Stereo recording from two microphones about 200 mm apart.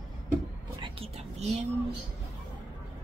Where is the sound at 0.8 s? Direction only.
30° right (ahead or behind).